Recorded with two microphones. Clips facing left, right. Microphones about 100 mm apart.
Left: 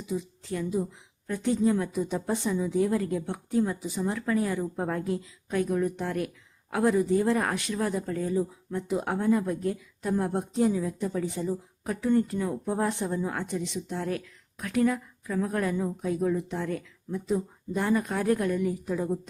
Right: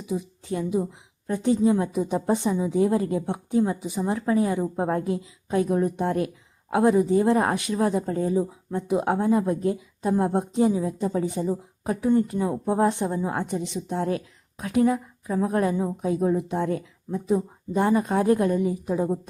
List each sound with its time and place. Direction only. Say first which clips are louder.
0.0 s a woman's voice: right 3 dB; 20° right (ahead or behind)